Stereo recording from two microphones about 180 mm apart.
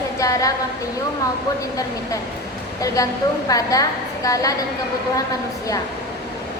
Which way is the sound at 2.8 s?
20° left (ahead or behind).